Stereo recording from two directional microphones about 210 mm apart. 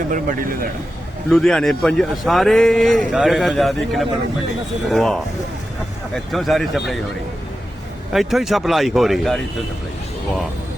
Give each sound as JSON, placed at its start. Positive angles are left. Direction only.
{"t": 0.1, "sound": "a man's voice", "side_deg": -40}
{"t": 1.3, "sound": "a man's voice", "side_deg": 0}
{"t": 8.1, "sound": "a man's voice", "side_deg": 0}